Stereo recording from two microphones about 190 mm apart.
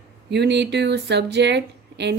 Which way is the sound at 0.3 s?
65° right (ahead or behind).